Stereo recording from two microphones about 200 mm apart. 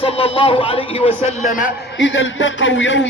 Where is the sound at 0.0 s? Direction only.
30° left (ahead or behind).